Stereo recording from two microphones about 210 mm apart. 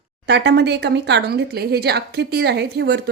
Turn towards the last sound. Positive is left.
turn(degrees=-50)  # may be behind; listen again after turning